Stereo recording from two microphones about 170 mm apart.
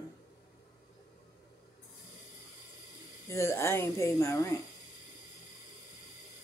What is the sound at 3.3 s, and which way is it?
Speech, 15° left (ahead or behind).